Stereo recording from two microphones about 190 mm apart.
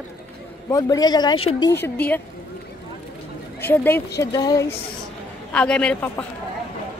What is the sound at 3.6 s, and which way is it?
Speech, 10° left (ahead or behind).